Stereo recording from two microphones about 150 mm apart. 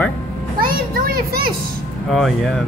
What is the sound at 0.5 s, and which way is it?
A child's voice, 75° right (ahead or behind).